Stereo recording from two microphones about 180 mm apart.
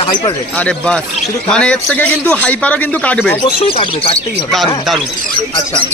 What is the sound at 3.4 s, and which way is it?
Speech, 30° left (ahead or behind).